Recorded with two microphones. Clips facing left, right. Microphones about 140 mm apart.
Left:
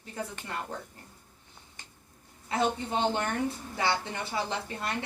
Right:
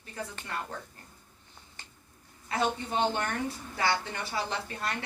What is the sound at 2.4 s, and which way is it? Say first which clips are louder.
Speech: left 1 dB; 25° left (ahead or behind).